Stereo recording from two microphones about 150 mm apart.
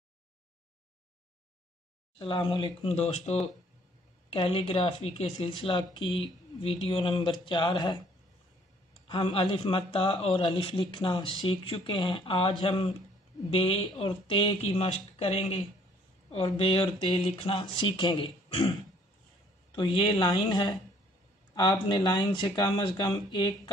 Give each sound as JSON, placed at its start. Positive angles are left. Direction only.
{"t": 2.1, "sound": "speech", "side_deg": 35}
{"t": 9.0, "sound": "speech", "side_deg": 35}
{"t": 19.7, "sound": "speech", "side_deg": 35}